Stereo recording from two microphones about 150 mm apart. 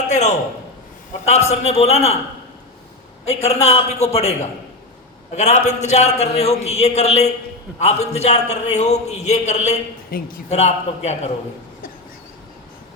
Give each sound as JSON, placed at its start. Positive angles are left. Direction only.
{"t": 0.1, "sound": "a man's voice", "side_deg": 50}
{"t": 3.2, "sound": "a man's voice", "side_deg": 45}
{"t": 5.4, "sound": "a man's voice", "side_deg": 50}
{"t": 10.1, "sound": "a man's voice", "side_deg": 75}
{"t": 10.5, "sound": "a man's voice", "side_deg": 45}